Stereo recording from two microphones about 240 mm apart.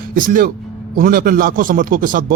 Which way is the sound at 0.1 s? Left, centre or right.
Right.